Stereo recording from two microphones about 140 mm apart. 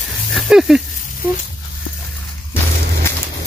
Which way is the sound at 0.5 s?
5° right (ahead or behind).